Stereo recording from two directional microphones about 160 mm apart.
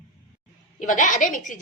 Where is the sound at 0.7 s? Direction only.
50° left (ahead or behind).